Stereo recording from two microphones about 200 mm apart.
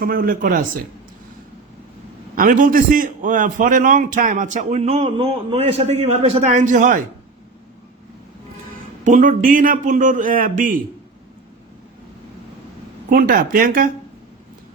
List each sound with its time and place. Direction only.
0.0 s speech: 45° right (ahead or behind)
2.3 s a man's voice: 40° right (ahead or behind)
9.0 s a man's voice: 40° right (ahead or behind)
13.1 s speech: 45° right (ahead or behind)